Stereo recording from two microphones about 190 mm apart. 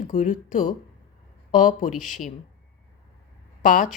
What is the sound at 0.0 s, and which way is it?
Speech, 45° left (ahead or behind).